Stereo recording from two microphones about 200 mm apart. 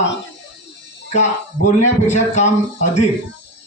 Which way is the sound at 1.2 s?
35° left (ahead or behind).